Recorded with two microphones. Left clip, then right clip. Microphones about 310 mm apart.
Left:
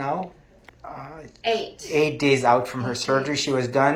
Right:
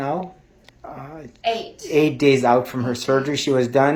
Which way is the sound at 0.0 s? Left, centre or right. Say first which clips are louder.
Right 2 dB; right.